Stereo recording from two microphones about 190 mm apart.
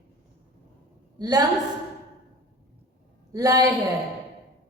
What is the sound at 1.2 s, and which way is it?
Speech, 20° right (ahead or behind).